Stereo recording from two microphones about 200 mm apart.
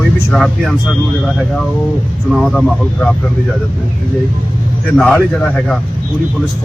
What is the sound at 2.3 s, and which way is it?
Speech, centre (ahead or behind).